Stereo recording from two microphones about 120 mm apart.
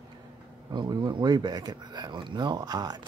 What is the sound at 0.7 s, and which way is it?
Speech, 35° right (ahead or behind).